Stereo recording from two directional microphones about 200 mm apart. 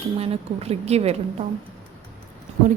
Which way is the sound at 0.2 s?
30° right (ahead or behind).